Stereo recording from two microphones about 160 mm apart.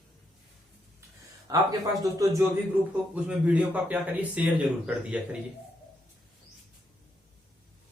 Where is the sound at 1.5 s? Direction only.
20° right (ahead or behind).